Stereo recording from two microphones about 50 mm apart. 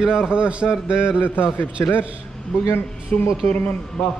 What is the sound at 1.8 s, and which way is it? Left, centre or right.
Speech, left.